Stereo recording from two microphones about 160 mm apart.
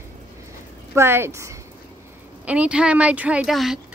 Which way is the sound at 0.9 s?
15° right (ahead or behind).